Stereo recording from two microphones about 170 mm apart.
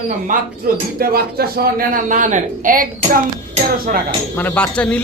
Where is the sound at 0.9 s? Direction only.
65° right (ahead or behind).